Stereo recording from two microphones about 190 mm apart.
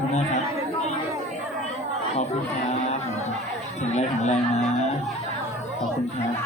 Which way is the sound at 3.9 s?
35° left (ahead or behind).